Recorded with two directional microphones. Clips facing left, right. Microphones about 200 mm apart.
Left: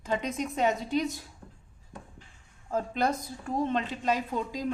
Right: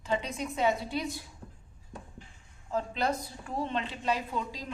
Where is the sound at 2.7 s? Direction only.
45° left (ahead or behind).